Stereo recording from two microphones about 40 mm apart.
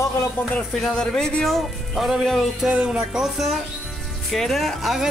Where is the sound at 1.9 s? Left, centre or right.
Centre.